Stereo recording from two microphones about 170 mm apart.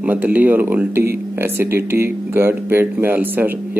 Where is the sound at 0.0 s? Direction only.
10° right (ahead or behind).